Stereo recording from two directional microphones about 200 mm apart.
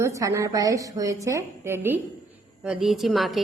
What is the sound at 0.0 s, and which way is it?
A woman's voice, 15° right (ahead or behind).